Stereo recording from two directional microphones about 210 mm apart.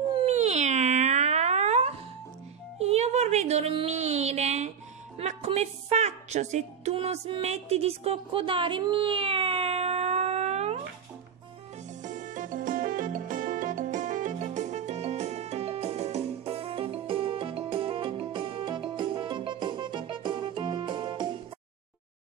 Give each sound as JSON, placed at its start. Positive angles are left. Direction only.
{"t": 0.1, "sound": "a sound", "side_deg": -30}
{"t": 5.2, "sound": "a woman's voice", "side_deg": -30}
{"t": 12.0, "sound": "music", "side_deg": -35}